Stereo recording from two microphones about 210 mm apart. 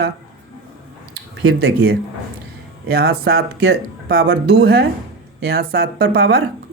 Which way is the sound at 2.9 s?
50° right (ahead or behind).